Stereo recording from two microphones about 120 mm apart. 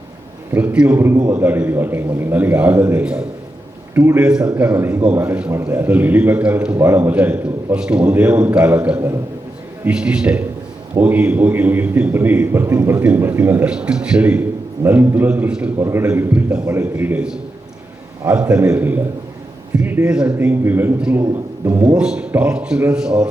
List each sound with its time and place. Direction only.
0.5 s a man's voice: 10° right (ahead or behind)
0.9 s a man's voice: 20° right (ahead or behind)
3.9 s a man's voice: 20° right (ahead or behind)
4.2 s a man's voice: 5° right (ahead or behind)
15.8 s a man's voice: 20° right (ahead or behind)
21.2 s a man's voice: 25° right (ahead or behind)
21.8 s a man's voice: 5° right (ahead or behind)